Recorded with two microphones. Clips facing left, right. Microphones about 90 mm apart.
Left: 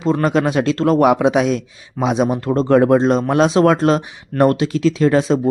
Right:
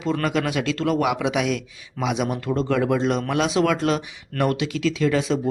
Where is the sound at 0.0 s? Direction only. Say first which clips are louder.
Left 7 dB; 30° left (ahead or behind).